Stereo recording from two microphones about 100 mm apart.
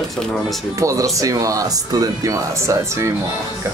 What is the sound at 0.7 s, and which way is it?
Speech, 30° right (ahead or behind).